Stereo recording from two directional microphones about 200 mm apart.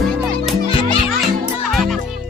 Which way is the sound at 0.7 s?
25° left (ahead or behind).